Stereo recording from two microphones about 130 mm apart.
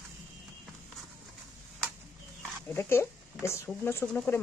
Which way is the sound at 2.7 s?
20° left (ahead or behind).